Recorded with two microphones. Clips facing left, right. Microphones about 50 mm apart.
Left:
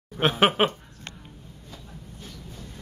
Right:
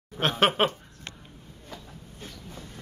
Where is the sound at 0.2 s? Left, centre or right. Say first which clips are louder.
Left 2 dB; centre.